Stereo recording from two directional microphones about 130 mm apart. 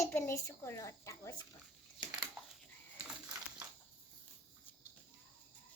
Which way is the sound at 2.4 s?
Centre (ahead or behind).